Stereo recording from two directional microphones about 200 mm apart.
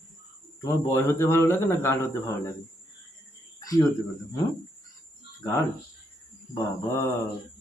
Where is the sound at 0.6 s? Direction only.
15° left (ahead or behind).